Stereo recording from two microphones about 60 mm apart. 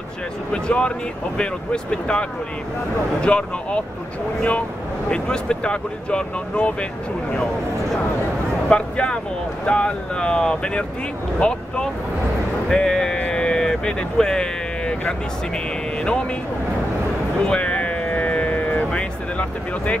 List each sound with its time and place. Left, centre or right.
0.5 s speech: centre
8.6 s speech: centre
17.5 s a sound: centre